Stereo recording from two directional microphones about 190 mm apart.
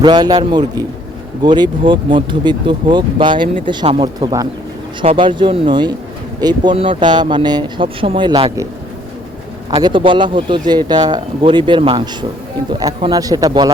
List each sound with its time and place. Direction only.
0.0 s speech: 20° right (ahead or behind)
9.6 s speech: 25° right (ahead or behind)